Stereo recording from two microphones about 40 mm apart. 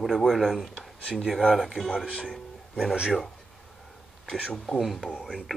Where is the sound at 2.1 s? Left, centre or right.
Left.